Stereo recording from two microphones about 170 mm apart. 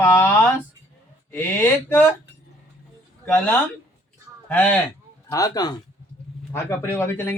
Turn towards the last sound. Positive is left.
turn(degrees=15)  # may be behind; listen again after turning